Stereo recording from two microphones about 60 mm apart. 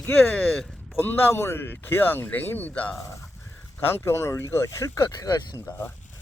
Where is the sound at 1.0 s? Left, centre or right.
Left.